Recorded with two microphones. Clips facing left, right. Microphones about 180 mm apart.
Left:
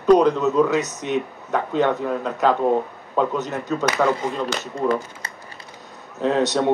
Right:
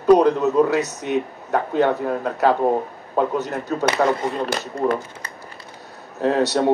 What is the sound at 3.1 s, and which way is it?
Speech, 20° right (ahead or behind).